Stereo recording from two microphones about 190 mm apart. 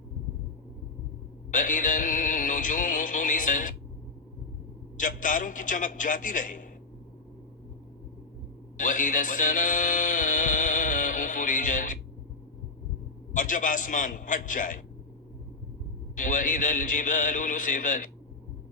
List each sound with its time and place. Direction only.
1.5 s music: 45° left (ahead or behind)
4.9 s a man's voice: 45° left (ahead or behind)
8.8 s a sound: 45° left (ahead or behind)
13.3 s a man's voice: 45° left (ahead or behind)
16.1 s a man's voice: 45° left (ahead or behind)